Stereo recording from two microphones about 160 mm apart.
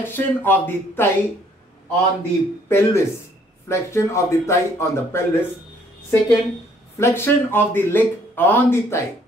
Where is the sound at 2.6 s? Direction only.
15° left (ahead or behind).